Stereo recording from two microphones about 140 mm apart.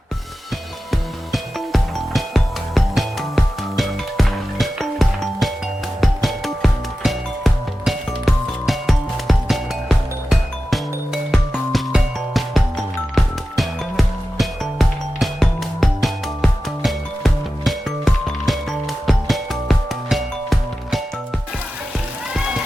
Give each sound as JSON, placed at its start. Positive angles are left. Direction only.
{"t": 0.9, "sound": "music", "side_deg": 0}